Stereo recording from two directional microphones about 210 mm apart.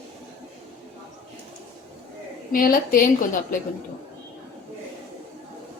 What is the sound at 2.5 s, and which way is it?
A woman's voice, 40° left (ahead or behind).